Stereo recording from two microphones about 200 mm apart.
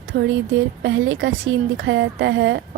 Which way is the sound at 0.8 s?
65° right (ahead or behind).